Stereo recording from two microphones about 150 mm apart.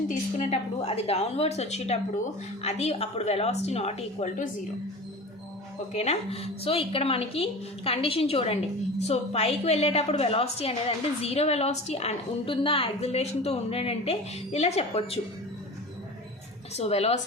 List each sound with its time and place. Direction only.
0.1 s a woman's voice: 50° left (ahead or behind)
5.9 s a woman's voice: 45° left (ahead or behind)
16.7 s a woman's voice: 45° left (ahead or behind)